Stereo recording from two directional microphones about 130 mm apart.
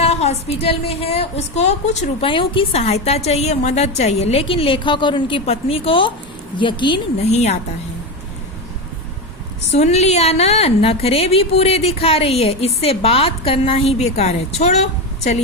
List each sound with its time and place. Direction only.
0.0 s a woman's voice: 55° left (ahead or behind)
2.2 s a woman's voice: 40° left (ahead or behind)
7.3 s a woman's voice: 60° left (ahead or behind)
9.7 s a woman's voice: 60° left (ahead or behind)